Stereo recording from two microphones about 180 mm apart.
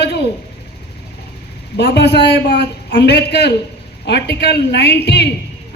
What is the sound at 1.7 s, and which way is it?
A woman's voice, 65° left (ahead or behind).